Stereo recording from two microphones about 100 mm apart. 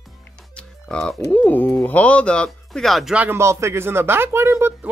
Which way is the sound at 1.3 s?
15° left (ahead or behind).